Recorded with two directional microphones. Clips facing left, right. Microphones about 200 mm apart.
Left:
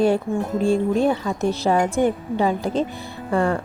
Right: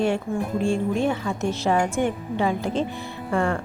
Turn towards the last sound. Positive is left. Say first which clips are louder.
# left 3 dB
turn(degrees=35)  # may be behind; listen again after turning